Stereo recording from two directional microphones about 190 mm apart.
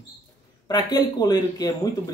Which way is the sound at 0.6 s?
20° left (ahead or behind).